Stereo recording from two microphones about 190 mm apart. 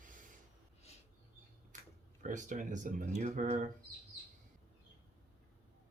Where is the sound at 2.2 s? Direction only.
40° right (ahead or behind).